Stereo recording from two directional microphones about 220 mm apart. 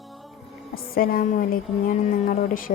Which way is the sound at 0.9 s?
40° left (ahead or behind).